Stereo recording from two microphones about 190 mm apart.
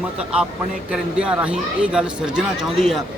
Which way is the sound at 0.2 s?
5° right (ahead or behind).